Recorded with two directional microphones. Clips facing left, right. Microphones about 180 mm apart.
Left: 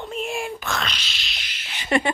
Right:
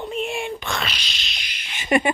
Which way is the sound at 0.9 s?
15° right (ahead or behind).